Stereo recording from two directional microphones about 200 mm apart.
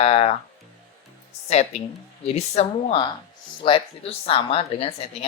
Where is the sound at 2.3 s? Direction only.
30° left (ahead or behind).